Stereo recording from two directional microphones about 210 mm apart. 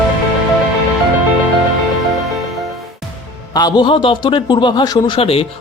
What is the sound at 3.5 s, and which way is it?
A man's voice, 20° left (ahead or behind).